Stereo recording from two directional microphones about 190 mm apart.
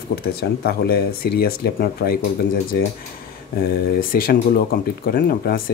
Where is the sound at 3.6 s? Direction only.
50° left (ahead or behind).